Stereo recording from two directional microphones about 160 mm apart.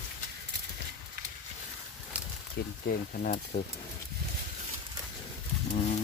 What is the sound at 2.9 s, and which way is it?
Speech, 60° left (ahead or behind).